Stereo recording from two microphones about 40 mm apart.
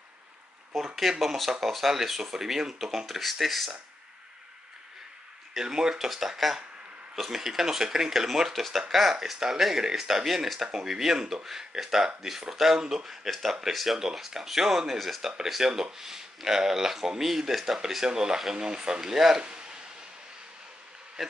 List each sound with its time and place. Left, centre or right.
0.7 s speech: centre
5.5 s speech: centre
19.1 s speech: centre
19.4 s a sound: right
21.2 s speech: centre